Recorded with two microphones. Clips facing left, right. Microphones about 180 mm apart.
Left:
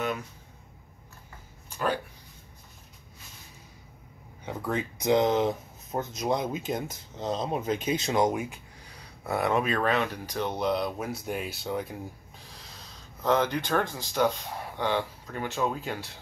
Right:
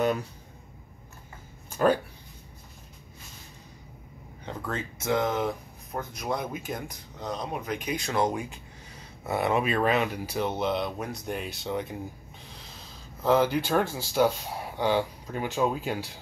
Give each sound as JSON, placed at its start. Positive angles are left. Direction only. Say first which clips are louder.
{"t": 1.7, "sound": "a sound", "louder": "right 6 dB", "side_deg": -45}
{"t": 4.5, "sound": "speech", "louder": "left 3 dB", "side_deg": 15}
{"t": 9.2, "sound": "speech", "louder": "even", "side_deg": -5}